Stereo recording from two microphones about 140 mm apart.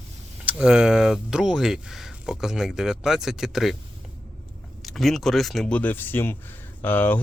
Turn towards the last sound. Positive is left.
turn(degrees=15)  # may be behind; listen again after turning